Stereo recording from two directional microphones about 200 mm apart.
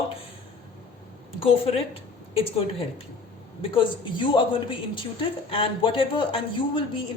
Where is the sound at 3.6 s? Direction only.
25° left (ahead or behind).